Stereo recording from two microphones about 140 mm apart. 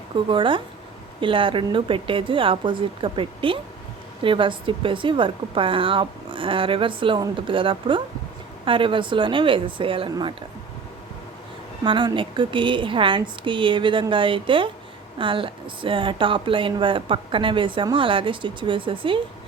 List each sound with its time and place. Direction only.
0.3 s a woman's voice: 35° right (ahead or behind)
11.8 s a woman's voice: 35° right (ahead or behind)